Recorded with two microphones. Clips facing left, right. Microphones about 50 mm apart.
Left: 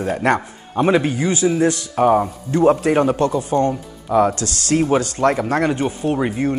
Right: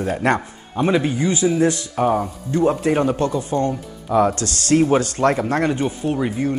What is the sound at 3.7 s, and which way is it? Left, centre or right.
Speech, centre.